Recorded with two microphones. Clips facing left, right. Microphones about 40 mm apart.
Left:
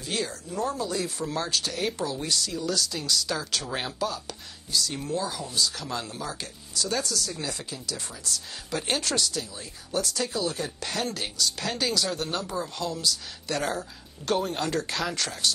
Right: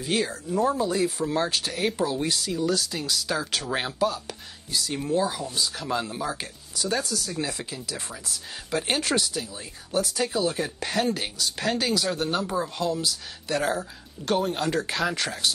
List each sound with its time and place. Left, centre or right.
0.0 s speech: centre